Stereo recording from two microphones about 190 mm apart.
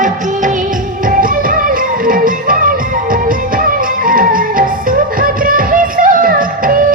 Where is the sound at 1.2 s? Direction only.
50° right (ahead or behind).